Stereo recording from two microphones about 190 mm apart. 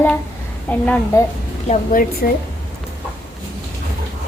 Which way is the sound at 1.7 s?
45° left (ahead or behind).